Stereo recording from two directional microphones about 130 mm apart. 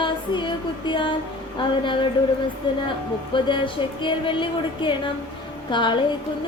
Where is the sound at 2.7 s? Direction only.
40° left (ahead or behind).